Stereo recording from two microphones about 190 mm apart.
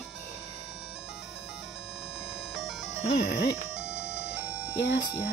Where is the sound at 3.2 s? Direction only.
60° left (ahead or behind).